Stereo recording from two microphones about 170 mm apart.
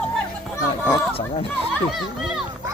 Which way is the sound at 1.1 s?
35° left (ahead or behind).